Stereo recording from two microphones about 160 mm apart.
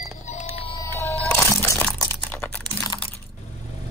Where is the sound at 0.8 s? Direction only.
15° left (ahead or behind).